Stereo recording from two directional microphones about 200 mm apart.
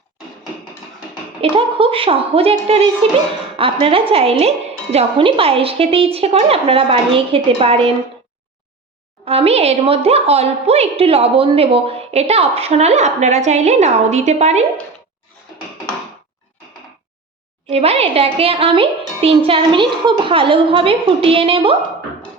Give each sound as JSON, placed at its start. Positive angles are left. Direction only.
{"t": 1.4, "sound": "a child's voice", "side_deg": -25}
{"t": 9.2, "sound": "a woman's voice", "side_deg": -30}
{"t": 17.7, "sound": "a child's voice", "side_deg": -30}